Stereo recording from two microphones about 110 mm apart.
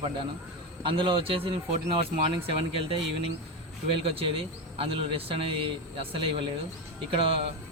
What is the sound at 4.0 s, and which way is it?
Speech, 60° right (ahead or behind).